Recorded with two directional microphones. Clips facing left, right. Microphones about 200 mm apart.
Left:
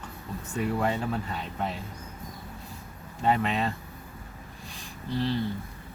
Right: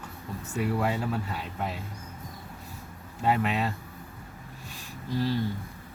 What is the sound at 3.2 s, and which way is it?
Speech, 5° right (ahead or behind).